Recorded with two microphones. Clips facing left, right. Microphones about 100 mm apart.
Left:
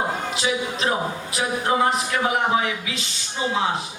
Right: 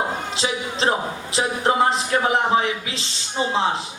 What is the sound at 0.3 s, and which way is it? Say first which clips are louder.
A woman's voice: even; 30° right (ahead or behind).